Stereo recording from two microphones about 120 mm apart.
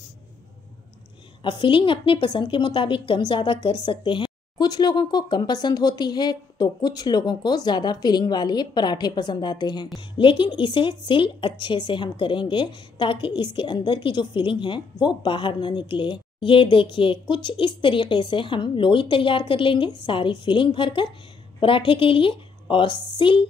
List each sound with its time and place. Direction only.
1.4 s a woman's voice: 40° left (ahead or behind)